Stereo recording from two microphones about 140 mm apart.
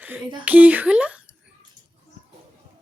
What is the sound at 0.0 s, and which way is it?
Speech, 10° right (ahead or behind).